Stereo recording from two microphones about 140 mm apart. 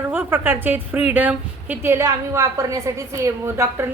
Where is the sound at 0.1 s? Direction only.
15° right (ahead or behind).